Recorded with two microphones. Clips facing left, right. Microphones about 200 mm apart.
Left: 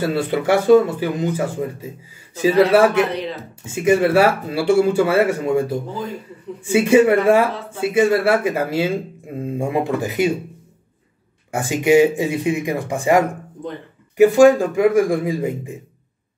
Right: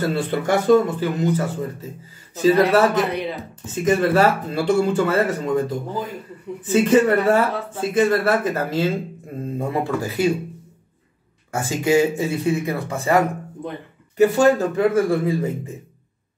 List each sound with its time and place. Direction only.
0.0 s speech: 10° left (ahead or behind)
11.5 s speech: 15° left (ahead or behind)